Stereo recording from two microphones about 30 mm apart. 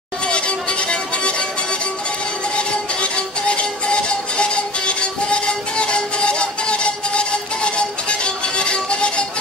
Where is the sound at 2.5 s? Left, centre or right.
Left.